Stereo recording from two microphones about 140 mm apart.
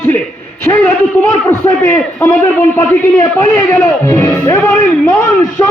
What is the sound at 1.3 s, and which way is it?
A man's voice, 15° left (ahead or behind).